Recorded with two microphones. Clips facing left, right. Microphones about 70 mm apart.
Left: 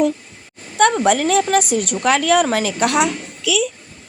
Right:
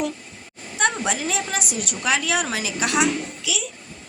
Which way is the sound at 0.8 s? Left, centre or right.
Left.